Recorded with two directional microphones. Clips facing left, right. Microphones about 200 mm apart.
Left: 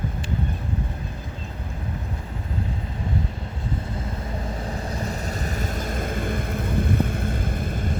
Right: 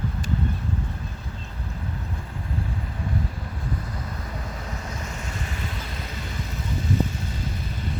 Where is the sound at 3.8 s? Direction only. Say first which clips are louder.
Left 4 dB; 25° left (ahead or behind).